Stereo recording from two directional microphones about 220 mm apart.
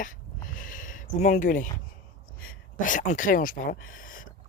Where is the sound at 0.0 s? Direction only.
40° left (ahead or behind).